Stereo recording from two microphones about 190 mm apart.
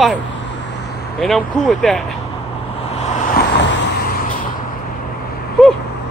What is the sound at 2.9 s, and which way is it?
Vehicle, 35° left (ahead or behind).